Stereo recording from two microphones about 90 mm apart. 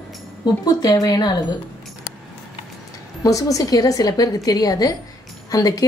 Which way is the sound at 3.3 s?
40° left (ahead or behind).